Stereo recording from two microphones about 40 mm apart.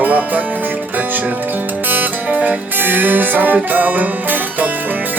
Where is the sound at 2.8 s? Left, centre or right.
Right.